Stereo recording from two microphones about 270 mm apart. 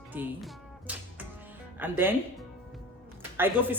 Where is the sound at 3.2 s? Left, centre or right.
Centre.